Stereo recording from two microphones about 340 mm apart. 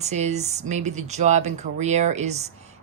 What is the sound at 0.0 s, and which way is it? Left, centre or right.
Speech, centre.